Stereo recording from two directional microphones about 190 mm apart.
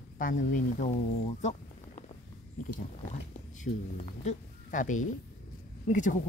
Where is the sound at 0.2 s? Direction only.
45° left (ahead or behind).